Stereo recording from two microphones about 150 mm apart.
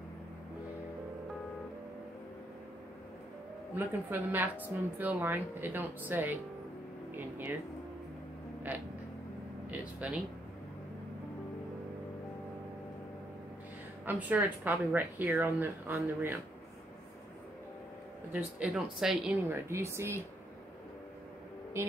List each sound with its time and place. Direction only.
3.7 s a woman's voice: 10° right (ahead or behind)
9.7 s speech: 10° right (ahead or behind)
14.0 s a woman's voice: 10° right (ahead or behind)
18.3 s speech: 5° right (ahead or behind)
19.5 s a woman's voice: 20° right (ahead or behind)
21.8 s a woman's voice: 15° right (ahead or behind)